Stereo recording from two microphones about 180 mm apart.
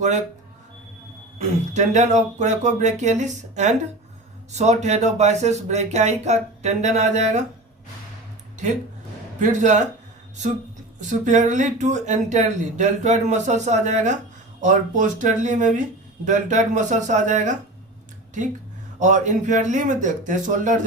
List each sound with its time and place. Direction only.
1.4 s speech: 40° right (ahead or behind)
9.4 s speech: 45° right (ahead or behind)
11.3 s speech: 45° right (ahead or behind)
18.9 s speech: 45° right (ahead or behind)